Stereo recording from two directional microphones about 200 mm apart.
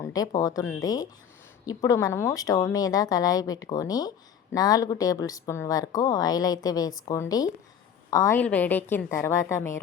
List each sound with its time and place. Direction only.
0.0 s a woman's voice: 20° left (ahead or behind)